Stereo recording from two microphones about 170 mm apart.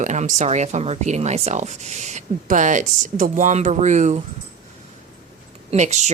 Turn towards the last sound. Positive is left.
turn(degrees=-40)  # may be behind; listen again after turning